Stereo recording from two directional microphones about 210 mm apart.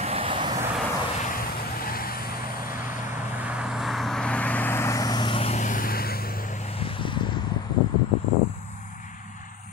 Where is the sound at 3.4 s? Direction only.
5° right (ahead or behind); by 6.5 s 45° left (ahead or behind).